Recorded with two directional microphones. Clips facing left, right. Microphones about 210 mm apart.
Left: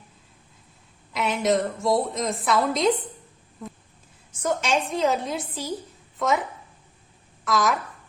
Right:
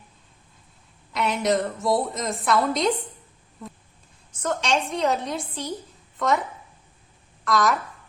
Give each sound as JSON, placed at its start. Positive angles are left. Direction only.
{"t": 1.1, "sound": "a woman's voice", "side_deg": 0}
{"t": 4.4, "sound": "a woman's voice", "side_deg": 10}
{"t": 7.4, "sound": "a woman's voice", "side_deg": 0}